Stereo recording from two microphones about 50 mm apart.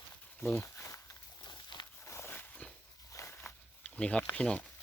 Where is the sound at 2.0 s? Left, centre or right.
Left.